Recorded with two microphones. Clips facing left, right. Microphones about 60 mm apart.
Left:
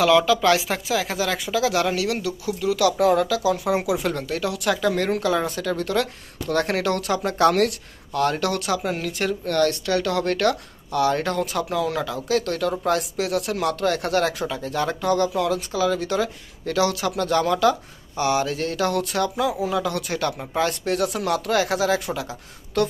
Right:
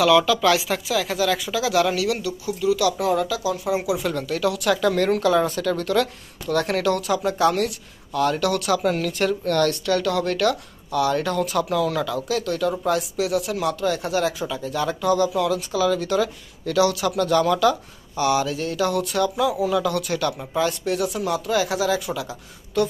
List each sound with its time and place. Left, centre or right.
0.0 s speech: left
2.2 s speech: left
4.2 s speech: left
8.1 s speech: left
8.8 s speech: left
10.1 s speech: left
12.3 s speech: left
14.4 s speech: left
21.5 s speech: left